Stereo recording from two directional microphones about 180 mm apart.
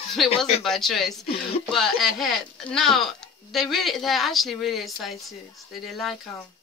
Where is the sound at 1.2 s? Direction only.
30° left (ahead or behind).